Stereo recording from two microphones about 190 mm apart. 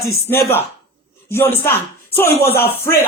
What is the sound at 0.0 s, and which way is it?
Speech, 10° left (ahead or behind).